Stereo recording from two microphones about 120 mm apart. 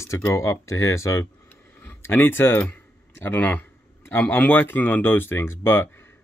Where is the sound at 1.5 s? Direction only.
15° left (ahead or behind).